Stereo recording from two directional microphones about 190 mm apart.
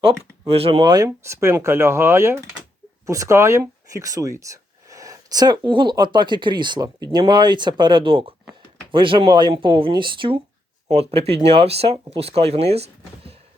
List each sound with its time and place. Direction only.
0.5 s speech: 30° right (ahead or behind)